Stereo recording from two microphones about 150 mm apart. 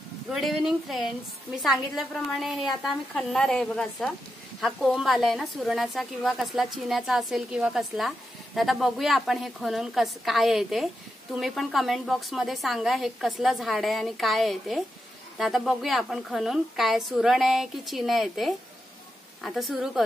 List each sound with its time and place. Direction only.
0.3 s a woman's voice: centre (ahead or behind)